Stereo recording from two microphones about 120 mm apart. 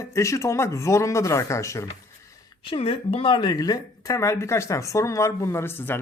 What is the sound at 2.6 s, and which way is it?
Speech, 45° left (ahead or behind).